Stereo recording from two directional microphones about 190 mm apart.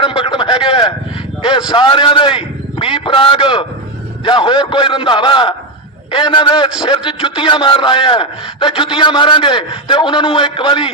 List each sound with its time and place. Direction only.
0.0 s a man's voice: 25° left (ahead or behind)